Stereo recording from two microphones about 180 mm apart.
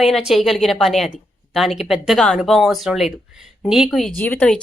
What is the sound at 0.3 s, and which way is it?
Speech, centre (ahead or behind).